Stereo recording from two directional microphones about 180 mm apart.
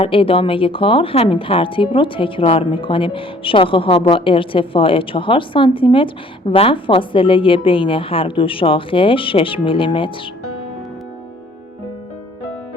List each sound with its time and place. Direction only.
0.0 s speech: 30° left (ahead or behind)